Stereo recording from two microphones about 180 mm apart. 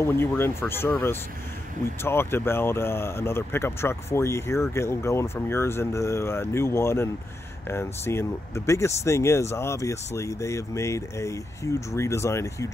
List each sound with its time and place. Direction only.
0.0 s speech: 15° left (ahead or behind)
2.0 s speech: 15° left (ahead or behind)